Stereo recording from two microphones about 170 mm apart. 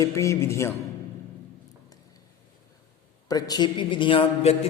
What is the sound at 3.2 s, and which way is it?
A man's voice, 20° left (ahead or behind).